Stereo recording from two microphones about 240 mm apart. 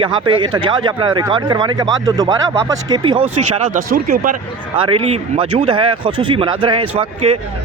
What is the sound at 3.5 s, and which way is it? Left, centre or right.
Speech, right.